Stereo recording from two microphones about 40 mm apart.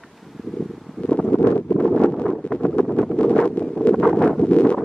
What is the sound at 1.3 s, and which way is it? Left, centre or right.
Wind noise, left.